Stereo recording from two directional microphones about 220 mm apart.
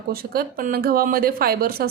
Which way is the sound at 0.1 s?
40° right (ahead or behind).